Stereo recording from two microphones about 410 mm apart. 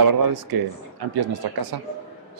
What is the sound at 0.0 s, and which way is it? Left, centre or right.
Speech, right.